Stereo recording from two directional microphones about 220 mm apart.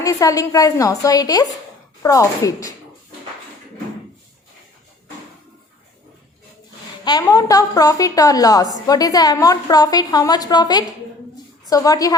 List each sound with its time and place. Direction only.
0.0 s a woman's voice: 15° left (ahead or behind)
7.0 s a woman's voice: 15° left (ahead or behind)